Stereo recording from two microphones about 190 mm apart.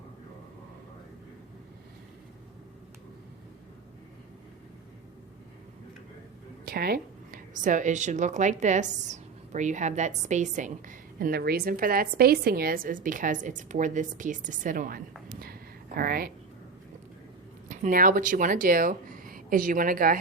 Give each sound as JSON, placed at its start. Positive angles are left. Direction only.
{"t": 6.7, "sound": "a woman's voice", "side_deg": -50}
{"t": 17.7, "sound": "speech", "side_deg": -45}